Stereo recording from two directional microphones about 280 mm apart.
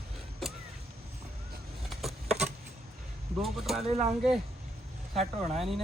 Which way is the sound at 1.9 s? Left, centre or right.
Centre.